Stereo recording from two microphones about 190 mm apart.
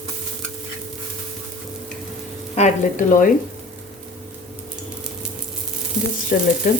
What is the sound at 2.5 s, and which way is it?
Speech, 40° left (ahead or behind).